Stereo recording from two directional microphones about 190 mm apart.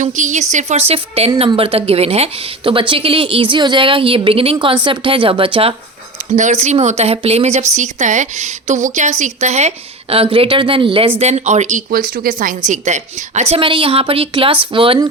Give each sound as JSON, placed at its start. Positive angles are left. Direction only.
{"t": 0.0, "sound": "speech", "side_deg": -40}